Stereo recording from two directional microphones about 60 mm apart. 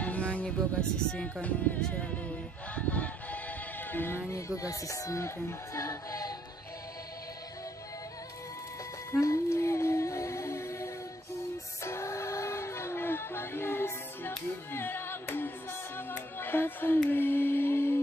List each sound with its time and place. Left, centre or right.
0.0 s music: left
4.6 s speech: left
9.2 s music: left